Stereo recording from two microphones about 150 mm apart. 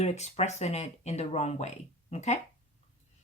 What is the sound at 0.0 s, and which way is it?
Speech, 45° left (ahead or behind).